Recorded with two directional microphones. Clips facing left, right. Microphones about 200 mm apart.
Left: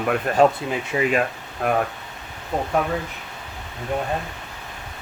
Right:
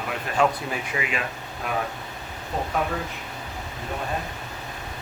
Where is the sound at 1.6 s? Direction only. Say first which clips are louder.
Left 8 dB; 55° left (ahead or behind).